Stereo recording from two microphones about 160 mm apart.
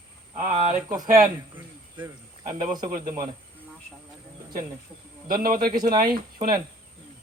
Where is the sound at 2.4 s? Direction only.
55° right (ahead or behind).